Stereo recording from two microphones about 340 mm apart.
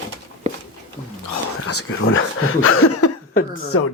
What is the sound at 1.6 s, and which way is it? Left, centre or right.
Speech, left.